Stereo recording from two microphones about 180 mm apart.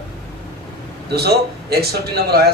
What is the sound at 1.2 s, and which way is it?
A man's voice, 60° right (ahead or behind).